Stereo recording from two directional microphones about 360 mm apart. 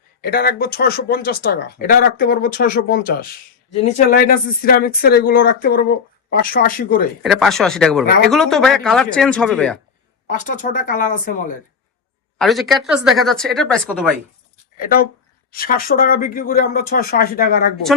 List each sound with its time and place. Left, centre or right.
0.2 s speech: left
7.2 s speech: centre
10.2 s speech: left
12.4 s speech: centre
14.8 s speech: left